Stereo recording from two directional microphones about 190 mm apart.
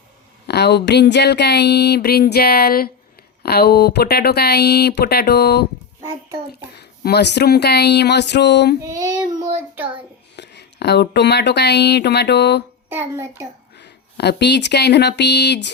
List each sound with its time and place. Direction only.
0.4 s a sound: 60° left (ahead or behind)
6.7 s a sound: 60° left (ahead or behind)
8.8 s child singing: 20° right (ahead or behind)
10.3 s speech: 65° left (ahead or behind)
12.9 s a child's voice: 10° right (ahead or behind)
13.7 s speech: 65° left (ahead or behind)